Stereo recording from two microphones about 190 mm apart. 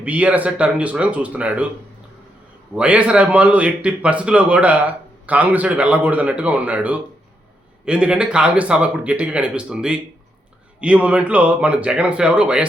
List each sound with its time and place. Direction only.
0.0 s a man's voice: 5° right (ahead or behind)
2.7 s a man's voice: 5° right (ahead or behind)